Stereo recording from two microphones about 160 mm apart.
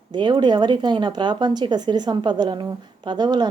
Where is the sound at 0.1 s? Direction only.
30° right (ahead or behind).